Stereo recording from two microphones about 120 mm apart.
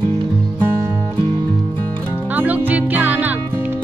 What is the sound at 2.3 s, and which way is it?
Music, 15° right (ahead or behind).